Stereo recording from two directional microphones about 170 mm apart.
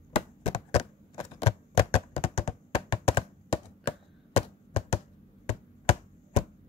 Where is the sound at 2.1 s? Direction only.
40° left (ahead or behind).